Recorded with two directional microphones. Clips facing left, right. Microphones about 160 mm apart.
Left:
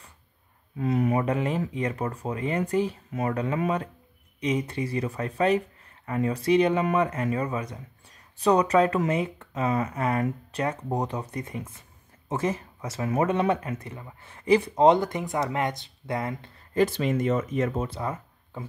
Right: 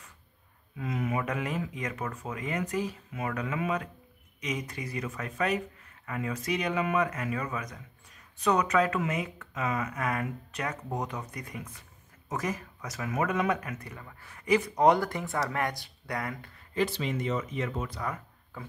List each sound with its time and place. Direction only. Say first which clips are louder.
0.7 s speech: left 7 dB; 35° left (ahead or behind)
16.7 s speech: left 6 dB; 50° left (ahead or behind)
17.8 s speech: left 4 dB; 25° left (ahead or behind)